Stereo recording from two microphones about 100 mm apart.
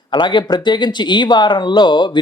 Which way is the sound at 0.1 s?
50° left (ahead or behind).